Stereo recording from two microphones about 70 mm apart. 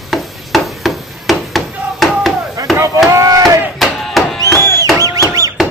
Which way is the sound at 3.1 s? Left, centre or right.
Right.